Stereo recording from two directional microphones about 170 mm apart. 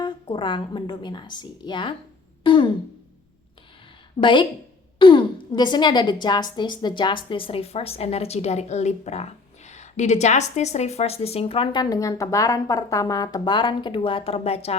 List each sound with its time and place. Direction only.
0.0 s a woman's voice: 30° left (ahead or behind)
2.4 s throat clearing: 30° left (ahead or behind)
4.2 s a woman's voice: 30° left (ahead or behind)